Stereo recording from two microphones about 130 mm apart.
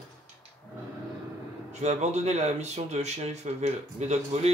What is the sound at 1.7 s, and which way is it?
Speech, 60° right (ahead or behind).